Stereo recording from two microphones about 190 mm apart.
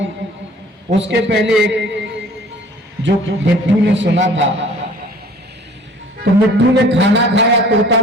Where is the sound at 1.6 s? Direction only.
70° right (ahead or behind).